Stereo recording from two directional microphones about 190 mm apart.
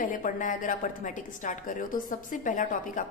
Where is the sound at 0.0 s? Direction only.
45° left (ahead or behind).